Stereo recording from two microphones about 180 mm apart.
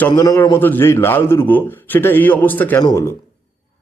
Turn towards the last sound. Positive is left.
turn(degrees=20)  # may be behind; listen again after turning